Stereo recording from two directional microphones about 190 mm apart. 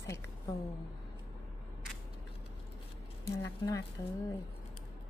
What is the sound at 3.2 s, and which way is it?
Speech, 15° left (ahead or behind).